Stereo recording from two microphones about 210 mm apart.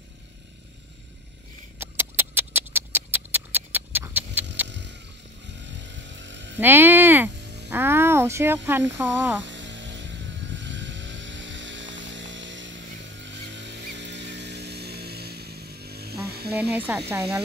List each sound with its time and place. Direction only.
1.8 s a sound: 10° right (ahead or behind)
4.6 s vehicle: 55° right (ahead or behind)
6.6 s speech: 10° right (ahead or behind)
7.7 s a sound: 10° right (ahead or behind)
8.9 s speech: 10° right (ahead or behind)
9.4 s vehicle: 60° right (ahead or behind)
16.3 s music: 50° right (ahead or behind)
16.5 s speech: 10° right (ahead or behind)